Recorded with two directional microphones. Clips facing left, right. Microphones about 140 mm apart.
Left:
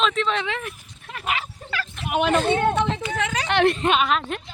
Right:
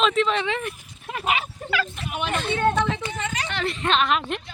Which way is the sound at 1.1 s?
20° right (ahead or behind).